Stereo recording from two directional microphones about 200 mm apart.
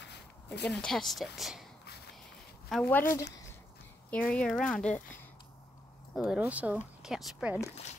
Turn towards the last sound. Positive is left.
turn(degrees=0)  # may be behind; listen again after turning